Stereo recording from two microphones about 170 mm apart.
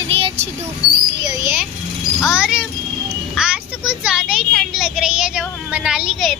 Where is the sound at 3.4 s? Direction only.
5° right (ahead or behind).